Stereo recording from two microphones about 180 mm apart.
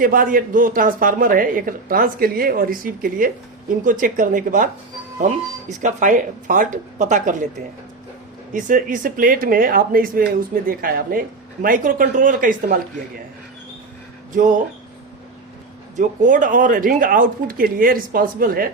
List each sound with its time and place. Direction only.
0.0 s speech: 50° right (ahead or behind)
8.5 s speech: 45° right (ahead or behind)
16.0 s speech: 45° right (ahead or behind)